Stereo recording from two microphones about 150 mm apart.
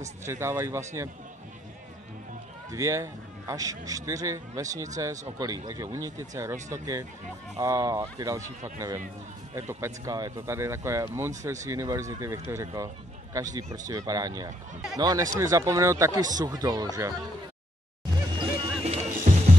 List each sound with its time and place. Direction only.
0.2 s speech: 15° right (ahead or behind)
2.7 s speech: 20° right (ahead or behind)
18.4 s music: 35° right (ahead or behind)
19.3 s music: 50° right (ahead or behind)